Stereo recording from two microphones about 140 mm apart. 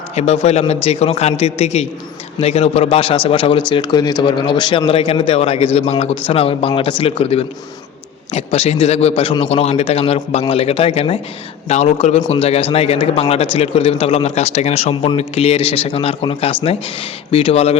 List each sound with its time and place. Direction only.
0.7 s speech: 50° left (ahead or behind)